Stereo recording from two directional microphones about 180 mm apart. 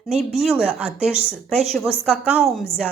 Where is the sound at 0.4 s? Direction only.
5° right (ahead or behind).